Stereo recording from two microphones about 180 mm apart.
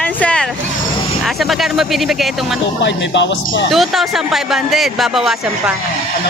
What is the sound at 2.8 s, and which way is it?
Speech, 80° left.